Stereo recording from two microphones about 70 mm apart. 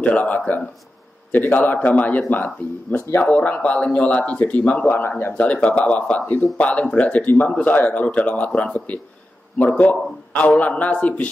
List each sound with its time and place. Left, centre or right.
0.0 s speech: left